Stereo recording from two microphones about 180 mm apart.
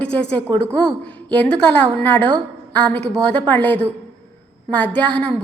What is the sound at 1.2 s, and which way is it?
A woman's voice, 5° left (ahead or behind).